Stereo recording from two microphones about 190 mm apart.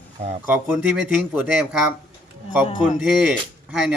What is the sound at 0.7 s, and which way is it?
Speech, 5° right (ahead or behind).